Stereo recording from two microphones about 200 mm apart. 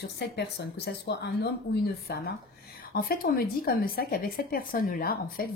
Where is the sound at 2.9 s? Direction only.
50° left (ahead or behind).